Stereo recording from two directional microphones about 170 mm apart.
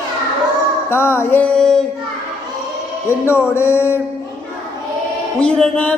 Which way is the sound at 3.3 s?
15° left (ahead or behind).